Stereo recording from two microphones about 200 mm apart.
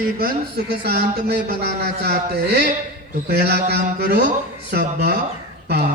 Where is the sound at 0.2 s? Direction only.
50° right (ahead or behind).